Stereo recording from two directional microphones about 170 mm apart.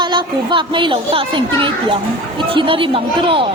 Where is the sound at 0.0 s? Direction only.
25° right (ahead or behind).